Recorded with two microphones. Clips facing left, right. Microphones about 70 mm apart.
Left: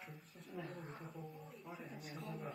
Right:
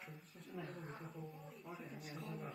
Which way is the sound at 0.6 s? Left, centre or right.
Left.